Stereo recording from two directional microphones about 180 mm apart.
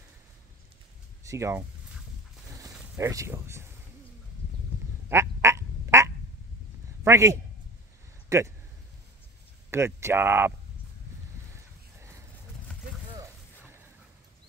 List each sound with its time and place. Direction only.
1.2 s speech: 15° right (ahead or behind)
2.4 s a sound: 20° right (ahead or behind)
3.0 s speech: 15° right (ahead or behind)
5.1 s quack: 15° right (ahead or behind)
7.1 s a man's voice: 15° right (ahead or behind)
9.7 s speech: 15° right (ahead or behind)
11.5 s a sound: 15° right (ahead or behind)